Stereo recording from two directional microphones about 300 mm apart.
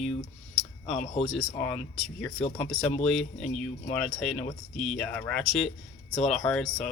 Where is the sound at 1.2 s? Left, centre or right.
Centre.